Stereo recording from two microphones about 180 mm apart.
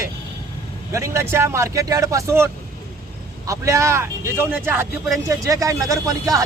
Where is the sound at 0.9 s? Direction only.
15° right (ahead or behind).